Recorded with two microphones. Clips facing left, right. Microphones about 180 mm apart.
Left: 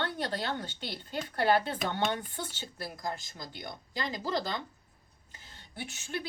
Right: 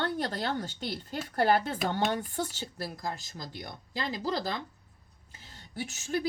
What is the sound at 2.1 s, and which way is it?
Speech, 40° right (ahead or behind).